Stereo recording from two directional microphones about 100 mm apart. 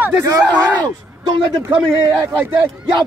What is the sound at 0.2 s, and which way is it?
Speech, 35° right (ahead or behind).